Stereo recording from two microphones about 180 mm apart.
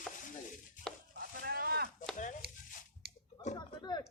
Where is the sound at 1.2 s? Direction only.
60° right (ahead or behind).